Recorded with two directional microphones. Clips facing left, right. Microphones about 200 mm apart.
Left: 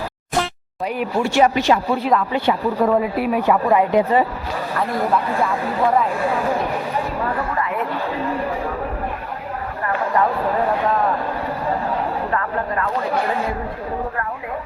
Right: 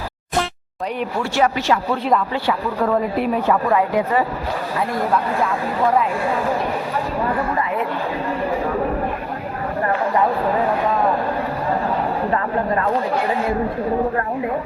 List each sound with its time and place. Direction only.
1.2 s speech: 15° left (ahead or behind)
12.3 s speech: 25° right (ahead or behind)